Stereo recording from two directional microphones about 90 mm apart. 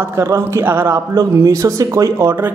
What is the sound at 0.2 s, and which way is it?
A man's voice, 30° right (ahead or behind).